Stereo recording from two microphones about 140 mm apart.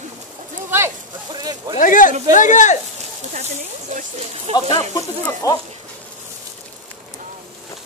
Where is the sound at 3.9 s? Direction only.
60° right (ahead or behind).